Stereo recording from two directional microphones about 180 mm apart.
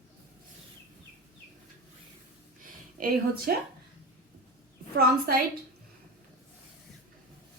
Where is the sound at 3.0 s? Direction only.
50° right (ahead or behind).